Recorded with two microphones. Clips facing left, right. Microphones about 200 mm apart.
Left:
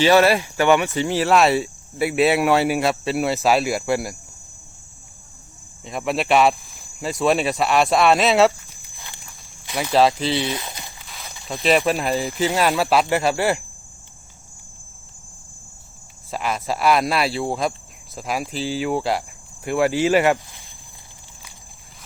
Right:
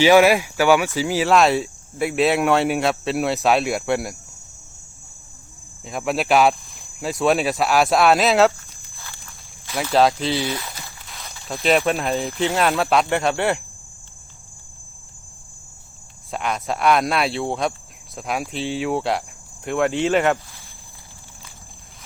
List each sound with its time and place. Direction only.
0.0 s speech: 10° right (ahead or behind)
5.8 s speech: centre (ahead or behind)
9.0 s walk: 15° left (ahead or behind)
9.9 s speech: centre (ahead or behind)
10.5 s a sound: 15° left (ahead or behind)
11.4 s speech: centre (ahead or behind)
16.3 s speech: centre (ahead or behind)